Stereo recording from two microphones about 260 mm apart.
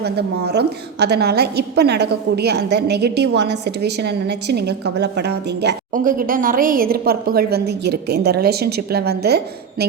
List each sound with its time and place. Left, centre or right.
0.0 s a woman's voice: right